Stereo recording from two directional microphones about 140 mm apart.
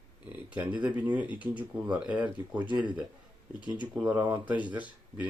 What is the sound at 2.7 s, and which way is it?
Speech, 35° right (ahead or behind).